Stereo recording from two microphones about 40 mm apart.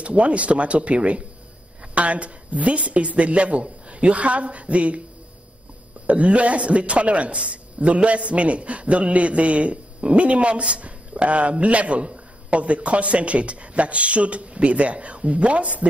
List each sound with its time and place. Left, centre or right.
0.0 s a man's voice: right
6.0 s a man's voice: right